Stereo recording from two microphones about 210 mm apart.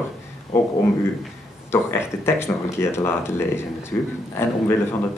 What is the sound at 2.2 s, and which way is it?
Speech, 10° left (ahead or behind).